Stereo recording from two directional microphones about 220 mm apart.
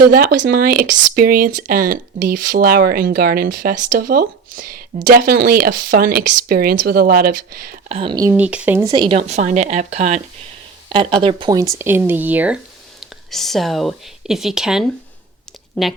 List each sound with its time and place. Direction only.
0.0 s speech: 40° right (ahead or behind)
7.9 s speech: 25° right (ahead or behind); by 8.9 s 10° right (ahead or behind)
8.9 s speech: 20° right (ahead or behind); by 16.0 s centre (ahead or behind)